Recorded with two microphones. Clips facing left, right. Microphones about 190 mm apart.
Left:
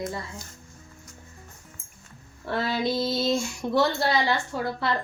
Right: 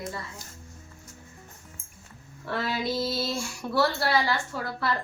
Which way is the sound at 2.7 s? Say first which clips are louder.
Left 3 dB; 5° right (ahead or behind).